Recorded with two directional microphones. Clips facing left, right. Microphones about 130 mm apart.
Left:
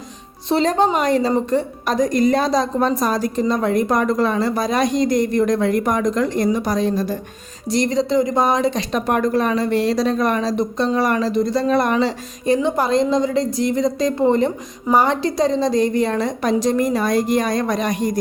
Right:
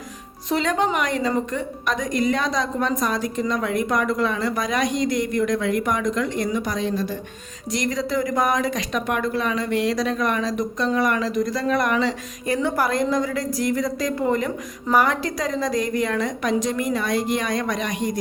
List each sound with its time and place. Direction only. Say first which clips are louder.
0.4 s a woman's voice: left 5 dB; 35° left (ahead or behind)
7.7 s a woman's voice: left 6 dB; 30° left (ahead or behind)
12.5 s a woman's voice: left 3 dB; 20° left (ahead or behind); by 18.2 s 40° left (ahead or behind)